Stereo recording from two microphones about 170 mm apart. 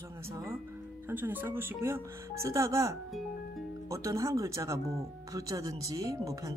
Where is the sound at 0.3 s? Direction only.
15° right (ahead or behind).